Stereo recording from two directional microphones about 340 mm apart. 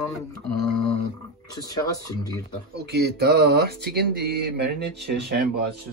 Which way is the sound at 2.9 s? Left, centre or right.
Right.